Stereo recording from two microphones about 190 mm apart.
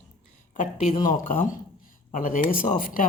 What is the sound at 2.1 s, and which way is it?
Speech, 45° left (ahead or behind).